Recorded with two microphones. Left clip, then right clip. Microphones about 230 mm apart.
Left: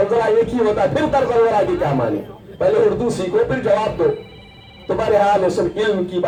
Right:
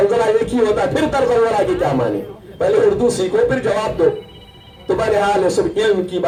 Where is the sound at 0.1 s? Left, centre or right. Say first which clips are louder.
Even; right.